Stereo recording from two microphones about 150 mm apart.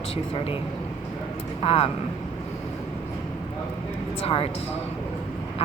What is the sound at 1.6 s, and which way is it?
Speech, 40° left (ahead or behind).